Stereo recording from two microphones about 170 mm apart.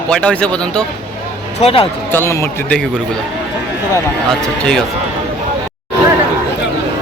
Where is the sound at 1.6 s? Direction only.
35° left (ahead or behind).